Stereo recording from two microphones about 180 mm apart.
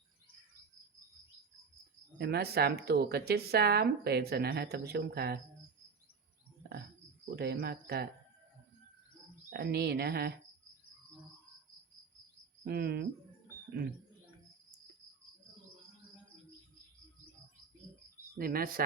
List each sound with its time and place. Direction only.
2.1 s speech: 65° right (ahead or behind)
6.6 s a sound: 60° right (ahead or behind)
7.3 s speech: 60° right (ahead or behind)
9.5 s speech: 60° right (ahead or behind)
12.6 s speech: 65° right (ahead or behind)
18.3 s speech: 55° right (ahead or behind)